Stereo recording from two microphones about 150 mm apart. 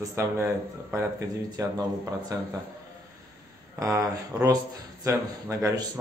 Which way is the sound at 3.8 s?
20° right (ahead or behind).